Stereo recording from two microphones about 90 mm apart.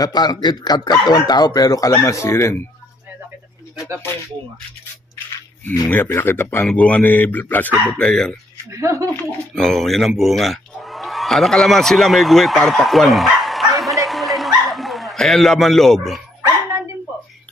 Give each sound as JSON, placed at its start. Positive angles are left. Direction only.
{"t": 0.0, "sound": "speech", "side_deg": 45}
{"t": 2.0, "sound": "speech", "side_deg": 30}
{"t": 5.7, "sound": "speech", "side_deg": 20}
{"t": 8.0, "sound": "speech", "side_deg": 5}
{"t": 8.7, "sound": "speech", "side_deg": -35}
{"t": 9.6, "sound": "speech", "side_deg": 5}